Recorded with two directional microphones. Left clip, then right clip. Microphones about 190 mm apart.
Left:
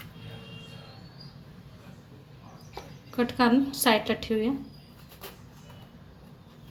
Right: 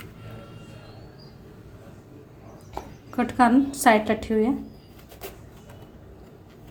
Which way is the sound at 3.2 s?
25° right (ahead or behind).